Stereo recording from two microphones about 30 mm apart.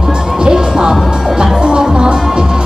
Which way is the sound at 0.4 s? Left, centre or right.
Right.